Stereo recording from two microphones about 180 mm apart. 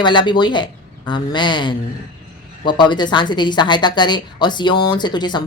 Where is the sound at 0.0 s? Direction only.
25° left (ahead or behind).